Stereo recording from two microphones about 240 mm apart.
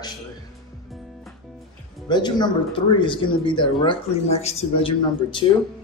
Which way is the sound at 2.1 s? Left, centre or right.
Centre.